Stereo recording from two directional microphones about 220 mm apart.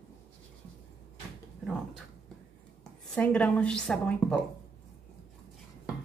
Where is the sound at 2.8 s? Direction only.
5° left (ahead or behind).